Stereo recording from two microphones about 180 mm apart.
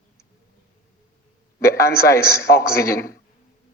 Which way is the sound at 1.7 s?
60° left (ahead or behind).